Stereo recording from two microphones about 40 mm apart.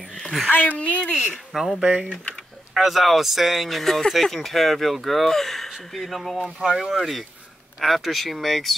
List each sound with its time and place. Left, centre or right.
0.0 s a sound: centre
0.5 s speech: left
1.5 s speech: centre
1.8 s speech: right
2.7 s speech: centre
6.6 s speech: centre
6.9 s speech: centre